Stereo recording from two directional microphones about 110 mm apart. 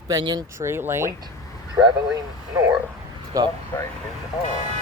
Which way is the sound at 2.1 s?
30° right (ahead or behind).